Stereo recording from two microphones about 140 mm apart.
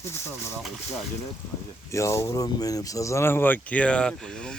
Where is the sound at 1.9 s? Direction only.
20° left (ahead or behind).